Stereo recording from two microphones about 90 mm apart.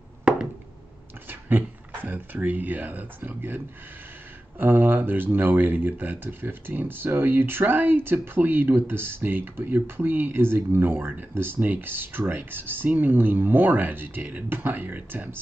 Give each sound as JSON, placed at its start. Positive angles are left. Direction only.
{"t": 1.3, "sound": "speech", "side_deg": -20}